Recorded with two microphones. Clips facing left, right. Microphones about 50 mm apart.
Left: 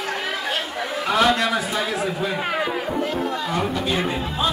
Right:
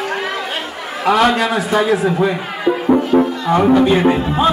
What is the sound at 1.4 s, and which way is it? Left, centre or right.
Speech, right.